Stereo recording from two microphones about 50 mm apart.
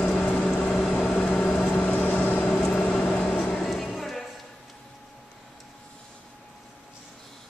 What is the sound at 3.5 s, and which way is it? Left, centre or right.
Music, centre.